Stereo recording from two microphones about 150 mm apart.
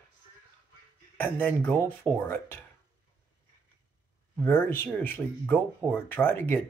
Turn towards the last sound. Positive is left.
turn(degrees=15)  # may be behind; listen again after turning